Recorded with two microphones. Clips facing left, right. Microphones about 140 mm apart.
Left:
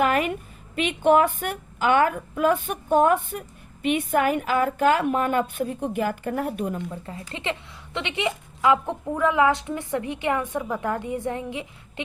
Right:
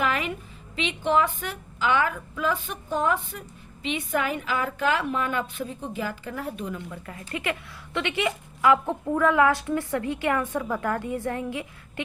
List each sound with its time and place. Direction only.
0.0 s a woman's voice: 50° left (ahead or behind)
6.9 s a woman's voice: 25° left (ahead or behind)